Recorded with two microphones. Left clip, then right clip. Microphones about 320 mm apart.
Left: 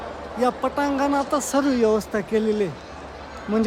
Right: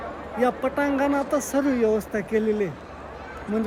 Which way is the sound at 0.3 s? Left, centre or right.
Centre.